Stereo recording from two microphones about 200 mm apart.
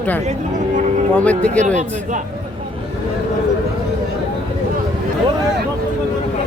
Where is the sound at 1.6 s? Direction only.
35° right (ahead or behind).